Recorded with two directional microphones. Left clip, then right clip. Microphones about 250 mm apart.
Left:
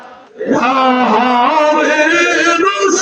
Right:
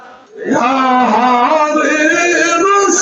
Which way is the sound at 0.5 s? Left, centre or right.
Left.